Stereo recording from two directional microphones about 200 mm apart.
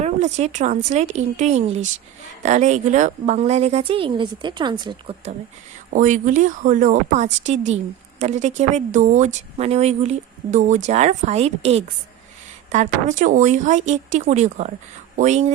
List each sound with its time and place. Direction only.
0.0 s speech: 35° right (ahead or behind)
5.9 s speech: 40° right (ahead or behind)